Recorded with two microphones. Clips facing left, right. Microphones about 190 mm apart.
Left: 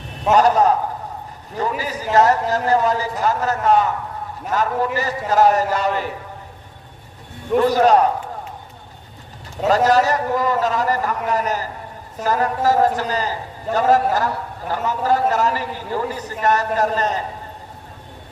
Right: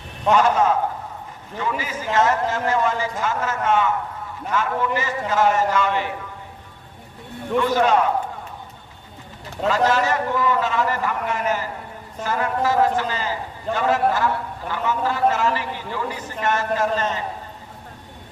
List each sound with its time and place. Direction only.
0.3 s a man's voice: 40° left (ahead or behind)
7.5 s a man's voice: 40° left (ahead or behind)
9.6 s a man's voice: 40° left (ahead or behind)